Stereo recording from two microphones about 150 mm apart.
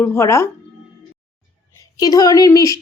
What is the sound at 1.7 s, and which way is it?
A woman's voice, 25° left (ahead or behind).